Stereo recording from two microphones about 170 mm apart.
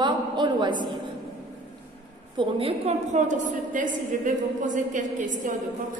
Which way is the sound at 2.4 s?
35° right (ahead or behind).